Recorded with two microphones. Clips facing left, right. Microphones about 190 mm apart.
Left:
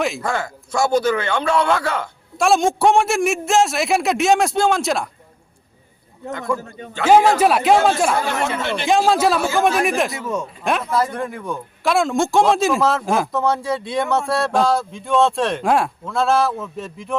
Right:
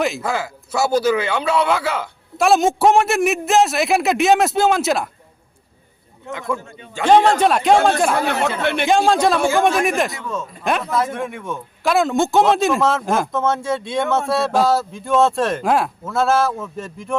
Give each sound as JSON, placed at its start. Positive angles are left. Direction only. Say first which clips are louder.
{"t": 0.0, "sound": "speech", "louder": "right 1 dB", "side_deg": 0}
{"t": 6.6, "sound": "a man's voice", "louder": "left 4 dB", "side_deg": 40}
{"t": 7.0, "sound": "speech", "louder": "even", "side_deg": 5}
{"t": 8.6, "sound": "speech", "louder": "right 4 dB", "side_deg": -60}
{"t": 8.9, "sound": "speech", "louder": "even", "side_deg": 5}
{"t": 10.2, "sound": "speech", "louder": "left 3 dB", "side_deg": 20}
{"t": 10.6, "sound": "speech", "louder": "right 1 dB", "side_deg": 0}